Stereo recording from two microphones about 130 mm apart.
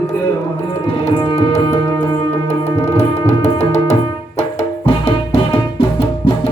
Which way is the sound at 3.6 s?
60° left (ahead or behind).